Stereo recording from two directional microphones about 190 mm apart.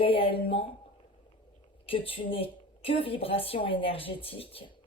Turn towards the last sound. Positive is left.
turn(degrees=30)  # may be behind; listen again after turning